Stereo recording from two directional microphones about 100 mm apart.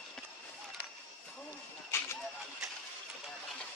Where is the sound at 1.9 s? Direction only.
25° left (ahead or behind).